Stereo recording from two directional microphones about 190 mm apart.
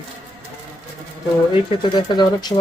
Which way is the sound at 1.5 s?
20° left (ahead or behind).